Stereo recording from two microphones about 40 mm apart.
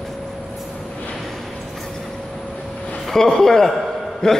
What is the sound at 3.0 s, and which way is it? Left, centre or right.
Speech, centre.